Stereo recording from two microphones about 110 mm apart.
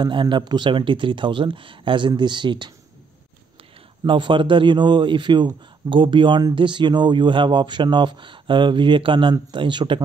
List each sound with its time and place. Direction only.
0.0 s a man's voice: 45° right (ahead or behind)
4.0 s a man's voice: 45° right (ahead or behind)